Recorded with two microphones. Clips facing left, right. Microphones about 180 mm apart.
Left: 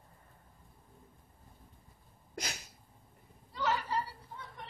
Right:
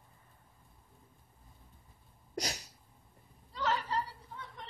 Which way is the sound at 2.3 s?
35° right (ahead or behind).